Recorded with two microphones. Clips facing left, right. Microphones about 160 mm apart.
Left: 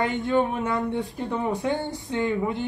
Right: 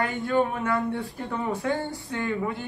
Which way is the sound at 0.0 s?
20° left (ahead or behind).